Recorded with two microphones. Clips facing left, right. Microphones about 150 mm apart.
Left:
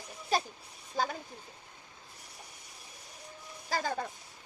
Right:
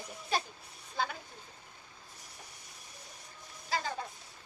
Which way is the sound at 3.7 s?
45° left (ahead or behind).